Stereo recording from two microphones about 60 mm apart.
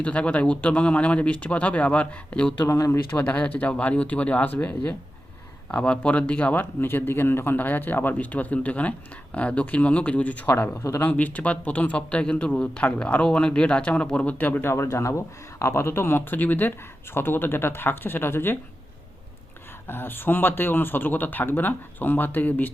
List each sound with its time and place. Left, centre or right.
0.0 s speech: left
2.6 s speech: left
3.1 s speech: left
14.7 s speech: left
15.5 s speech: left
19.9 s speech: left